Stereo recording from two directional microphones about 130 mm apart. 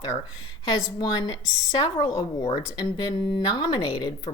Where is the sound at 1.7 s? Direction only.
35° left (ahead or behind).